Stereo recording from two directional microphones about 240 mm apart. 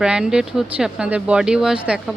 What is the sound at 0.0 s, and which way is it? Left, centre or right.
Speech, centre.